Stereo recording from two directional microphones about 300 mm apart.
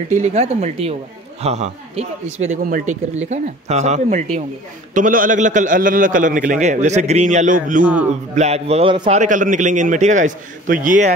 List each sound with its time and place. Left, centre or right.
0.1 s a man's voice: right
7.8 s a man's voice: centre
8.4 s a man's voice: right